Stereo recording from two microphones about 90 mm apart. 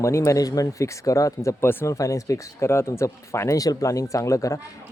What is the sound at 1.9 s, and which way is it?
Speech, 35° left (ahead or behind).